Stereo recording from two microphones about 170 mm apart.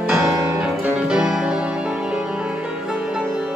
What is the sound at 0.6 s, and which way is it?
Music, 5° right (ahead or behind).